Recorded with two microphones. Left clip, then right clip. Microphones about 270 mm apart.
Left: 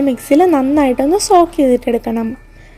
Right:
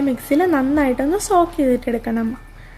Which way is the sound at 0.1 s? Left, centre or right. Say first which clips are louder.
Left 8 dB; left.